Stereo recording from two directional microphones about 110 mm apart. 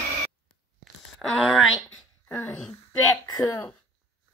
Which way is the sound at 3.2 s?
35° left (ahead or behind).